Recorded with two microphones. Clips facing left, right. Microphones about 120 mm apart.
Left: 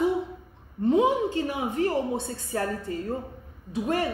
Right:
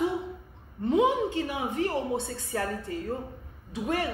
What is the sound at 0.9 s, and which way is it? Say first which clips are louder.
A woman's voice: left 2 dB; 35° left (ahead or behind).